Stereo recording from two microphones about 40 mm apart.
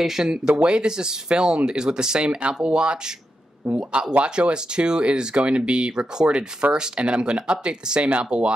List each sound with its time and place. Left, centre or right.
0.0 s speech: centre
0.6 s speech: right